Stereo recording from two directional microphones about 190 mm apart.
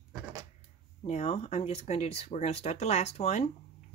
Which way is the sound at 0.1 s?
15° right (ahead or behind).